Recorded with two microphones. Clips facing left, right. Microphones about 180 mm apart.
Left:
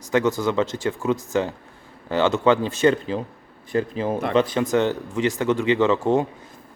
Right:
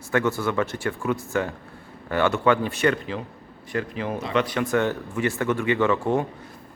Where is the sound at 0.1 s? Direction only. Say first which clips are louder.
Left 3 dB; 20° left (ahead or behind).